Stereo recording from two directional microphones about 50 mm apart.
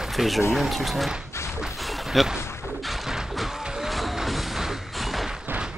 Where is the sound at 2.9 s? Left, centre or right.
Centre.